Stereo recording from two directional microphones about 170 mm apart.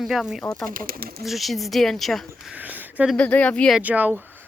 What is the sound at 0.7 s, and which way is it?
Speech, 55° right (ahead or behind).